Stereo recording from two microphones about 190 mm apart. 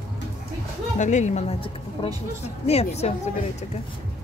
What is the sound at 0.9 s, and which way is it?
Speech, 40° left (ahead or behind).